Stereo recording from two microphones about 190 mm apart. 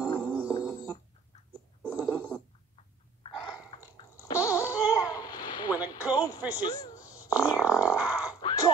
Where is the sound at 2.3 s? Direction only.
5° left (ahead or behind).